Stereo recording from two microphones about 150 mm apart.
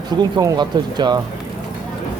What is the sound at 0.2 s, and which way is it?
Speech, 25° right (ahead or behind).